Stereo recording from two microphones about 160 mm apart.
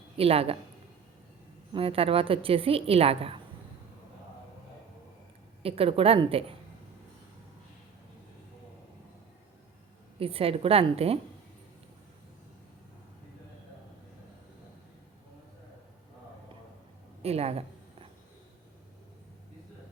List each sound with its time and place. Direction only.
0.2 s a woman's voice: 35° right (ahead or behind)
1.7 s a woman's voice: 35° right (ahead or behind)
5.6 s a woman's voice: 35° right (ahead or behind)
10.2 s a woman's voice: 35° right (ahead or behind)
17.2 s a woman's voice: 40° right (ahead or behind)